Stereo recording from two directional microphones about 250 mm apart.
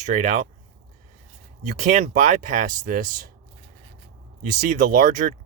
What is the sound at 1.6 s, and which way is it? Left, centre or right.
Speech, right.